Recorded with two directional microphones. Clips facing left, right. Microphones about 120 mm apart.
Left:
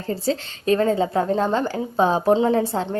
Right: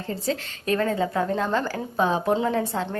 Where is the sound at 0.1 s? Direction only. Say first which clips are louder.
Left 5 dB; 30° left (ahead or behind).